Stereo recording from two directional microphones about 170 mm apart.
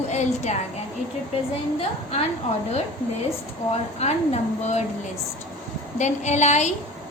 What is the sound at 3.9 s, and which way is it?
Speech, 40° left (ahead or behind).